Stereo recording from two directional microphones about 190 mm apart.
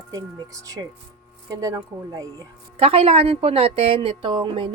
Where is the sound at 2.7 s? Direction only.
30° right (ahead or behind).